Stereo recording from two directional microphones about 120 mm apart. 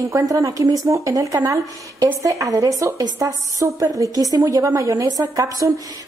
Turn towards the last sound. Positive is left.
turn(degrees=-30)  # may be behind; listen again after turning